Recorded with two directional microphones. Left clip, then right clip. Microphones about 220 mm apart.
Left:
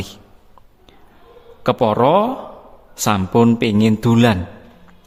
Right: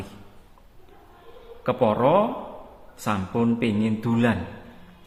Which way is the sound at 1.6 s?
45° left (ahead or behind).